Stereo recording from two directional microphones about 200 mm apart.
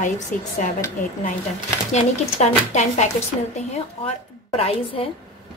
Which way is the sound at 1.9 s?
35° left (ahead or behind).